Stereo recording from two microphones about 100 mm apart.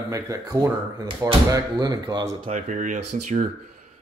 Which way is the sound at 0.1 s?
35° right (ahead or behind).